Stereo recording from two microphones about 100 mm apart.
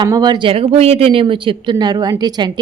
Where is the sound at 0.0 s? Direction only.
45° right (ahead or behind).